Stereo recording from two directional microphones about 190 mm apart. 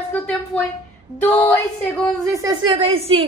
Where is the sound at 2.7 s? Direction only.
30° right (ahead or behind).